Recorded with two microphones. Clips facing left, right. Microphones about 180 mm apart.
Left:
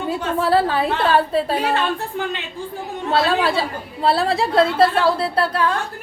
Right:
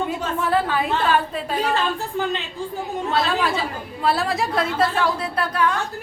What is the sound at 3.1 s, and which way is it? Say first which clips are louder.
A woman's voice: left 4 dB; 30° left (ahead or behind).